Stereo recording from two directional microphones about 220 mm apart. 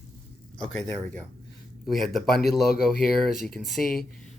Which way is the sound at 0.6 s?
5° left (ahead or behind).